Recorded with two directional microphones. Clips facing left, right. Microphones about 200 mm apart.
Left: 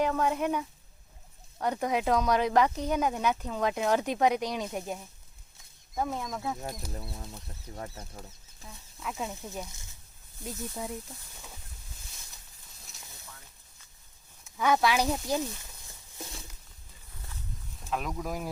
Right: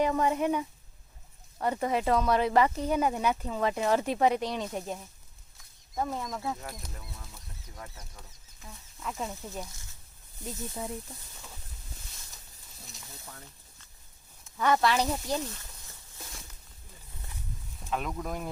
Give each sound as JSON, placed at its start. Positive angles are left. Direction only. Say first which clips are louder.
{"t": 0.1, "sound": "speech", "louder": "right 1 dB", "side_deg": -10}
{"t": 6.9, "sound": "speech", "louder": "left 6 dB", "side_deg": 35}
{"t": 8.6, "sound": "speech", "louder": "even", "side_deg": 5}
{"t": 12.9, "sound": "a sound", "louder": "right 2 dB", "side_deg": 0}
{"t": 14.6, "sound": "speech", "louder": "even", "side_deg": 5}
{"t": 17.8, "sound": "speech", "louder": "even", "side_deg": 0}